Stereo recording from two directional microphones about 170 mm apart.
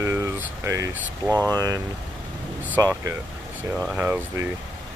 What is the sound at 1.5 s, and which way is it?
Speech, 20° right (ahead or behind).